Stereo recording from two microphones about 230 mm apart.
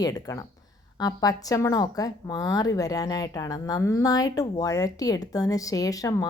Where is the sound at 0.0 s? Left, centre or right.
Centre.